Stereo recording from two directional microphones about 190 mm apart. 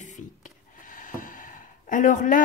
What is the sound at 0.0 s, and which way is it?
Speech, 40° left (ahead or behind).